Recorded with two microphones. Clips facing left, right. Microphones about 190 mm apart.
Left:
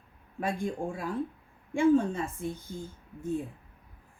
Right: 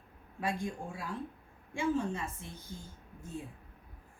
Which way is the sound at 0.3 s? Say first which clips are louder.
Left 4 dB; 55° left (ahead or behind).